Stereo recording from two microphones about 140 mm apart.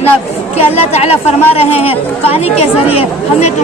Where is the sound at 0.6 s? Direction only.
50° left (ahead or behind).